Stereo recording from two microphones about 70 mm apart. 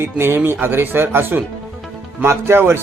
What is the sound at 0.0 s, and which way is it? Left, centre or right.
Speech, right.